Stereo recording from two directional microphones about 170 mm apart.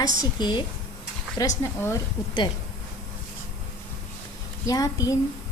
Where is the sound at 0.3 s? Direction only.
25° left (ahead or behind).